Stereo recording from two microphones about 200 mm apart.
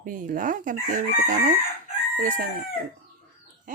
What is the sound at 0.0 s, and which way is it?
Speech, 40° right (ahead or behind).